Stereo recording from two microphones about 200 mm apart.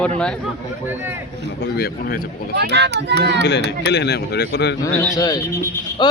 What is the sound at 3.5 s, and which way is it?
Speech, 60° left (ahead or behind).